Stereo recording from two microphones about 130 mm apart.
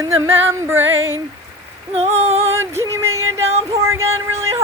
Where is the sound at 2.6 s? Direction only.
20° right (ahead or behind).